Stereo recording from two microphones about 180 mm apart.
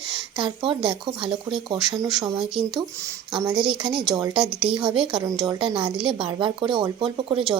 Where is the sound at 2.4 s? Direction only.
Centre (ahead or behind).